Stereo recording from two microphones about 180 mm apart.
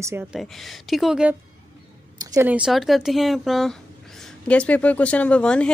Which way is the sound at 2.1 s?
20° right (ahead or behind).